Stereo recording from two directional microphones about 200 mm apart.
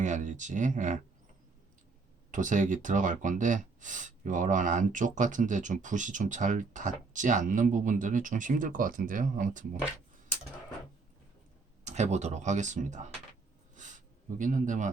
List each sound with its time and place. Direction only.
0.0 s speech: 35° right (ahead or behind)
2.3 s speech: 40° right (ahead or behind)
11.9 s speech: 35° right (ahead or behind)
13.7 s a sound: 40° right (ahead or behind)